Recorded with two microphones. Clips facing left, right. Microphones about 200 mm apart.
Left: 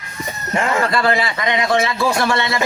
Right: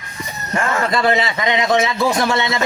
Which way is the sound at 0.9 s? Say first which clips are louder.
Right 1 dB; 20° right (ahead or behind).